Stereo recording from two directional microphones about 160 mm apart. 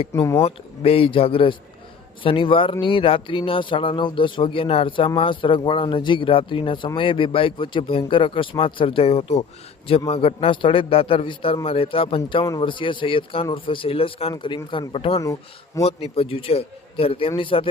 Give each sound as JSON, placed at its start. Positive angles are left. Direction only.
{"t": 0.2, "sound": "speech", "side_deg": 20}
{"t": 0.4, "sound": "speech", "side_deg": 40}
{"t": 15.2, "sound": "speech", "side_deg": 20}
{"t": 15.8, "sound": "speech", "side_deg": 40}